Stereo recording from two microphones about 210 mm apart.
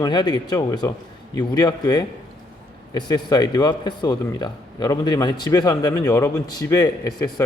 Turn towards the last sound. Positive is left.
turn(degrees=20)  # may be behind; listen again after turning